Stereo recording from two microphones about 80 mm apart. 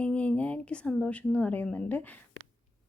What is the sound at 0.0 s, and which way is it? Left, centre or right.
Speech, centre.